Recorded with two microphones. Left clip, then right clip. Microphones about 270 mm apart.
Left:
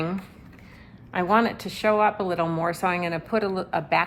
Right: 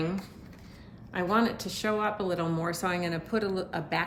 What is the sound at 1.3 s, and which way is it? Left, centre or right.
A woman's voice, centre.